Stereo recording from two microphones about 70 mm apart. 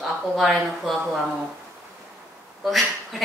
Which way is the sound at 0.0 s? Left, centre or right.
Centre.